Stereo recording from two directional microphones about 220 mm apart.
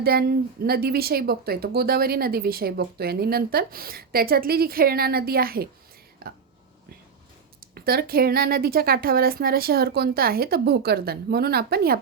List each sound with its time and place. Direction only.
0.0 s a woman's voice: 45° right (ahead or behind)
7.6 s a woman's voice: 45° right (ahead or behind)